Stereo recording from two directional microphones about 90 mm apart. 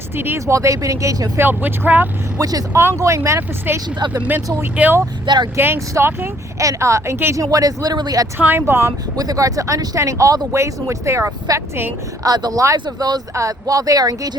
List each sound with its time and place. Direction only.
0.2 s speech: 25° right (ahead or behind)
0.4 s speech: 35° right (ahead or behind)
1.5 s speech: 20° right (ahead or behind)
2.4 s speech: 40° right (ahead or behind); by 5.0 s 25° right (ahead or behind)
5.2 s speech: 55° right (ahead or behind)
5.5 s speech: 25° right (ahead or behind)
7.5 s speech: 40° right (ahead or behind)
8.4 s speech: 25° right (ahead or behind)
9.1 s speech: 45° right (ahead or behind)
12.2 s speech: 45° right (ahead or behind)
12.7 s speech: 50° right (ahead or behind)